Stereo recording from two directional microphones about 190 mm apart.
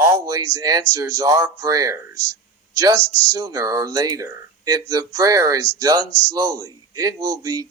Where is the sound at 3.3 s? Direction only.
20° right (ahead or behind).